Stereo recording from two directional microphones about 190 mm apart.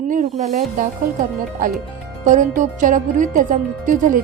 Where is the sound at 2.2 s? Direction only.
40° right (ahead or behind).